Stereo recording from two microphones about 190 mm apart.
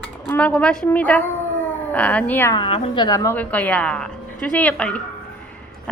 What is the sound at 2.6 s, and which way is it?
Speech, 30° left (ahead or behind).